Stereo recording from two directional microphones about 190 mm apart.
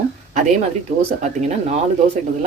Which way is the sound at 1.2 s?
35° right (ahead or behind).